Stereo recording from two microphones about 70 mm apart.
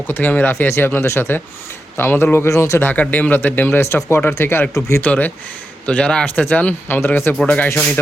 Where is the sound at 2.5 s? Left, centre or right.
Left.